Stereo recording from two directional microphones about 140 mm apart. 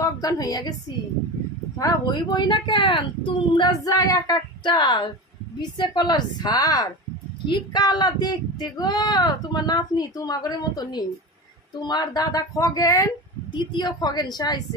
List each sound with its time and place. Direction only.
0.0 s a woman's voice: 25° left (ahead or behind)
1.8 s speech: 30° left (ahead or behind)